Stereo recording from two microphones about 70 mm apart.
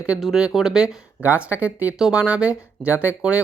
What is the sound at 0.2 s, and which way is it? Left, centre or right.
Speech, centre.